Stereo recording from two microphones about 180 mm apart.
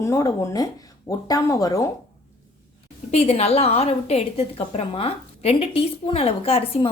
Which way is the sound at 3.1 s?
35° left (ahead or behind).